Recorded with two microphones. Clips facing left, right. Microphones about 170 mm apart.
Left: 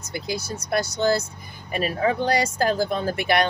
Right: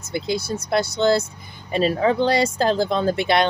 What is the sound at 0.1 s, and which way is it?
Speech, 25° right (ahead or behind).